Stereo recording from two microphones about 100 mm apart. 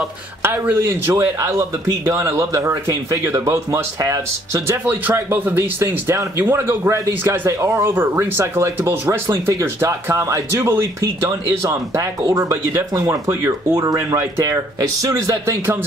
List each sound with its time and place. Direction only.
0.4 s speech: 25° right (ahead or behind)